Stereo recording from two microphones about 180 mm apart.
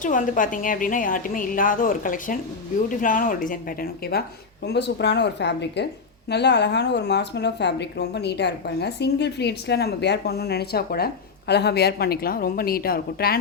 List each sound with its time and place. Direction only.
0.0 s a woman's voice: 45° left (ahead or behind)
4.6 s a woman's voice: 70° left (ahead or behind)